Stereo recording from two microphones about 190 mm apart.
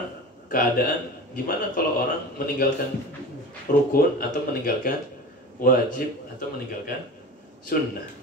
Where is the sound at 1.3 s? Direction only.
45° left (ahead or behind).